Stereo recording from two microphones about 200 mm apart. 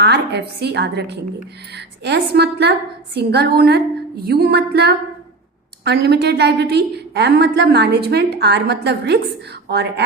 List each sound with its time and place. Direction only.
0.0 s a woman's voice: 55° right (ahead or behind)